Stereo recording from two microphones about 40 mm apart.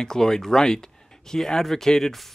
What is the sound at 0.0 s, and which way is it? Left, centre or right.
Speech, centre.